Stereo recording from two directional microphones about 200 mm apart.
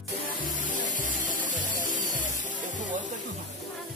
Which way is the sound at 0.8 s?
40° left (ahead or behind).